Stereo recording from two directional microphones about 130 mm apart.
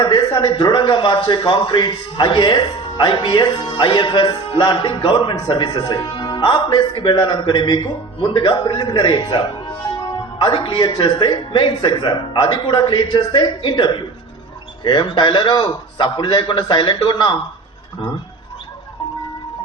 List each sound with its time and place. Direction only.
0.0 s speech: 35° left (ahead or behind)